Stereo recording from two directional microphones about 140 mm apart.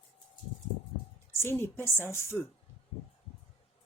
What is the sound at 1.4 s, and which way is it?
Speech, 15° left (ahead or behind).